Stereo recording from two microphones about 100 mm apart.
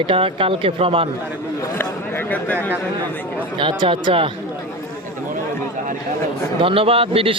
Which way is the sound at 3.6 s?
60° right (ahead or behind).